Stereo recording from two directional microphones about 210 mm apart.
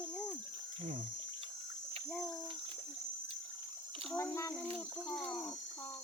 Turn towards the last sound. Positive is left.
turn(degrees=5)  # may be behind; listen again after turning